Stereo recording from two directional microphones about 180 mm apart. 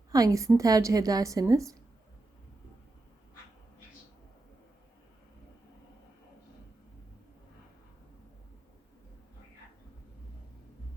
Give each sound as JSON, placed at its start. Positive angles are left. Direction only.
{"t": 0.1, "sound": "a woman's voice", "side_deg": -20}